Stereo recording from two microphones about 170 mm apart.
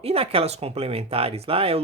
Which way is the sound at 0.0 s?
35° right (ahead or behind).